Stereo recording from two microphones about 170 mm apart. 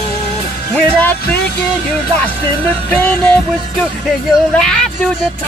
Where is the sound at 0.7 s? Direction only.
10° left (ahead or behind).